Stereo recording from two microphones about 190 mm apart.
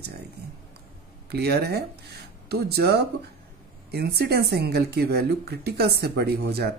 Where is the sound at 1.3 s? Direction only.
55° right (ahead or behind).